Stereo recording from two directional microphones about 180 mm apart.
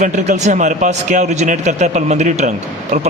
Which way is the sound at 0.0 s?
40° right (ahead or behind).